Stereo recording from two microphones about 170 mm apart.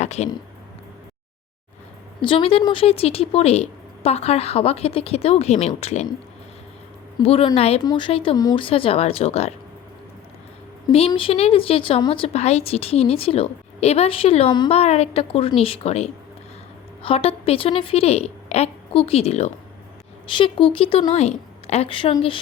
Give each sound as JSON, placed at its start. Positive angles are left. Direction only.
{"t": 0.0, "sound": "a sound", "side_deg": 40}
{"t": 2.2, "sound": "a woman's voice", "side_deg": 30}
{"t": 7.2, "sound": "a woman's voice", "side_deg": 35}
{"t": 7.8, "sound": "a woman's voice", "side_deg": 25}
{"t": 10.8, "sound": "a woman's voice", "side_deg": 30}